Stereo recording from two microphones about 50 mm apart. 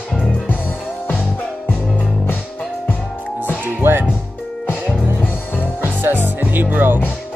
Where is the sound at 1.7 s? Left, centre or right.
Left.